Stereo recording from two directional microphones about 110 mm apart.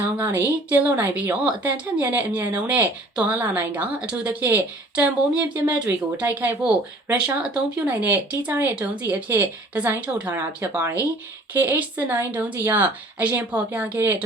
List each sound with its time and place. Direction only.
0.0 s a woman's voice: 20° right (ahead or behind)
10.6 s a woman's voice: 20° right (ahead or behind)